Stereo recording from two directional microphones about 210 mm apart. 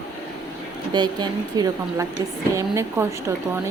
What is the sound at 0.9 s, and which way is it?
A woman's voice, 20° right (ahead or behind).